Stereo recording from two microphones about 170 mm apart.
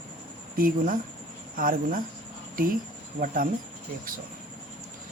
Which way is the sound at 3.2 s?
55° right (ahead or behind).